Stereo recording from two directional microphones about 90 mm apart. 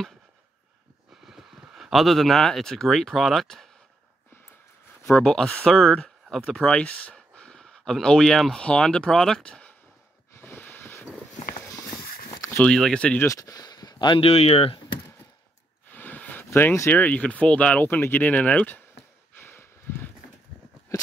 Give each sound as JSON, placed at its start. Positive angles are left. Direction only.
{"t": 1.2, "sound": "speech", "side_deg": -5}
{"t": 5.0, "sound": "speech", "side_deg": 5}
{"t": 6.6, "sound": "speech", "side_deg": 10}
{"t": 7.2, "sound": "a sound", "side_deg": 10}
{"t": 8.5, "sound": "speech", "side_deg": 10}
{"t": 10.3, "sound": "a sound", "side_deg": 20}
{"t": 12.5, "sound": "speech", "side_deg": 5}
{"t": 13.2, "sound": "speech", "side_deg": 40}
{"t": 14.2, "sound": "speech", "side_deg": 90}
{"t": 15.9, "sound": "a sound", "side_deg": 20}
{"t": 16.9, "sound": "speech", "side_deg": 15}
{"t": 19.3, "sound": "a sound", "side_deg": 25}